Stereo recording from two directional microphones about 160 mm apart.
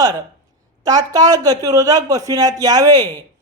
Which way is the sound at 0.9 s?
25° right (ahead or behind).